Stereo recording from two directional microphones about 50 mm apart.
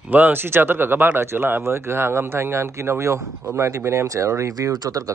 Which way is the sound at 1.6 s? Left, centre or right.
Right.